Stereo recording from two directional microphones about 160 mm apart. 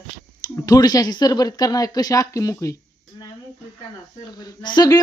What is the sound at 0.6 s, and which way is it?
Speech, 25° left (ahead or behind).